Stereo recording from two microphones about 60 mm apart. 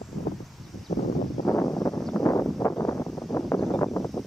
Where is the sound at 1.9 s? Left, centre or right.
Centre.